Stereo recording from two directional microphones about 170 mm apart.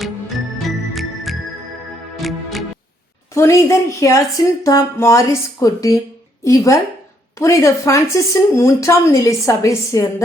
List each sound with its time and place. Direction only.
0.9 s music: centre (ahead or behind)
3.3 s speech: 15° left (ahead or behind)